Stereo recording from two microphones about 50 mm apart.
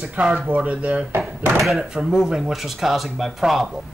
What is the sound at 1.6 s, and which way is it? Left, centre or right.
Speech, centre.